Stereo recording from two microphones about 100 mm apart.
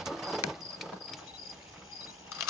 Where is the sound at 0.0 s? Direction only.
5° right (ahead or behind).